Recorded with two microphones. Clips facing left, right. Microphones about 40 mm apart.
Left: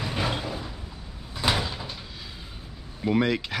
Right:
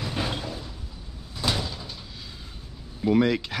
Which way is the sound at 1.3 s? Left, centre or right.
Left.